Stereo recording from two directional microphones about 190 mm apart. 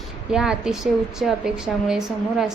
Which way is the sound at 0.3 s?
5° right (ahead or behind).